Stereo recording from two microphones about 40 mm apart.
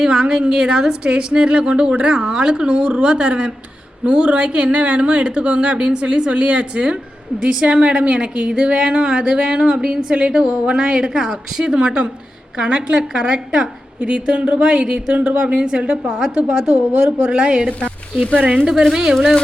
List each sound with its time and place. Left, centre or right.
0.0 s a woman's voice: centre
14.0 s a woman's voice: right
16.6 s speech: right
17.3 s a woman's voice: right
17.7 s speech: left
18.6 s a woman's voice: centre